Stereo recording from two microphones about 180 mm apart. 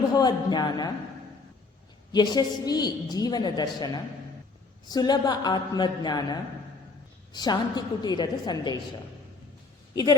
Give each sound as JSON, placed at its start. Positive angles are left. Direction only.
{"t": 0.1, "sound": "a woman's voice", "side_deg": 20}
{"t": 2.1, "sound": "a woman's voice", "side_deg": 20}
{"t": 9.9, "sound": "speech", "side_deg": 20}